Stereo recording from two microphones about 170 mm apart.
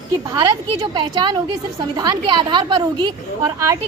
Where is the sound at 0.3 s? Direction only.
30° right (ahead or behind).